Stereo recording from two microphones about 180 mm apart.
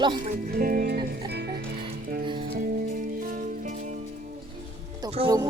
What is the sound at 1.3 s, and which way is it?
Music, 65° right (ahead or behind).